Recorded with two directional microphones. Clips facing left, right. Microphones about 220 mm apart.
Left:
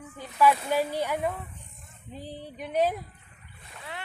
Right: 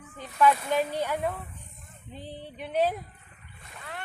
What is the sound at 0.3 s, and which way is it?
Speech, 10° left (ahead or behind).